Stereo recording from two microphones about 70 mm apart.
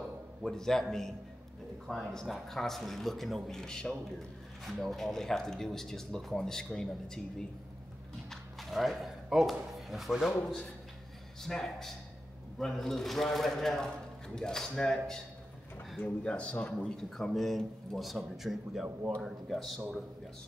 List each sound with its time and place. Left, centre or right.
0.5 s a man's voice: centre